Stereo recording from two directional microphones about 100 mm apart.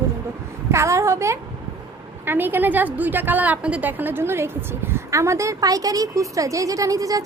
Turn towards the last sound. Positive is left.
turn(degrees=-35)  # may be behind; listen again after turning